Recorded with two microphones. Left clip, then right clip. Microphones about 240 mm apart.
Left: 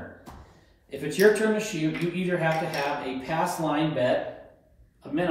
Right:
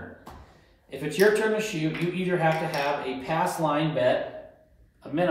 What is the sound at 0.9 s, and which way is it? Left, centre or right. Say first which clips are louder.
Speech: left 1 dB; right.